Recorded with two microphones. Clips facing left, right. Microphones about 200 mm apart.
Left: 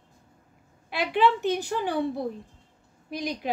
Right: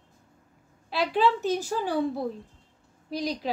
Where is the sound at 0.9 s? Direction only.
60° left (ahead or behind).